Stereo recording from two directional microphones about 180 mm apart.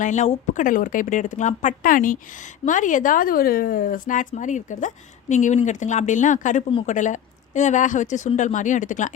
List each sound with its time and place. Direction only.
0.0 s a woman's voice: 40° left (ahead or behind)